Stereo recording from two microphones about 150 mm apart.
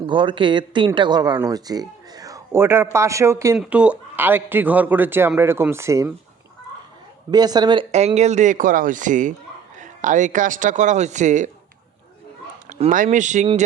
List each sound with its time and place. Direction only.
0.0 s a woman's voice: 35° right (ahead or behind)
7.3 s a woman's voice: 25° right (ahead or behind)
7.9 s speech: 45° right (ahead or behind)
12.6 s speech: 55° right (ahead or behind)